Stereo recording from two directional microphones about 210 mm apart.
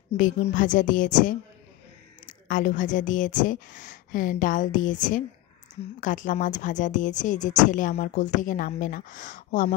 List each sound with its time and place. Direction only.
0.1 s a woman's voice: 35° left (ahead or behind)